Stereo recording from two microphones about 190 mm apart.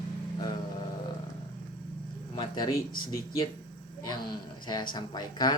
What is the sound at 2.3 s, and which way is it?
Speech, 25° left (ahead or behind).